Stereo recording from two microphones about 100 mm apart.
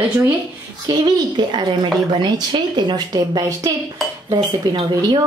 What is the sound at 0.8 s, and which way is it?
A woman's voice, 45° right (ahead or behind).